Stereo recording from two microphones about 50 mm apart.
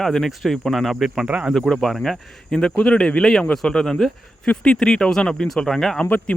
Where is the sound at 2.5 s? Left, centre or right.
Centre.